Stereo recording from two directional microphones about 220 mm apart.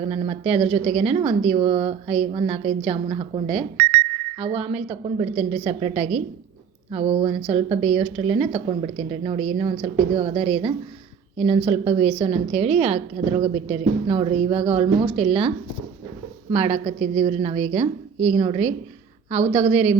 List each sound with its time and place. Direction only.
0.0 s speech: 25° right (ahead or behind)